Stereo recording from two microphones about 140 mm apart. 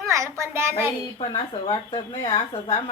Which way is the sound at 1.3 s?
30° left (ahead or behind).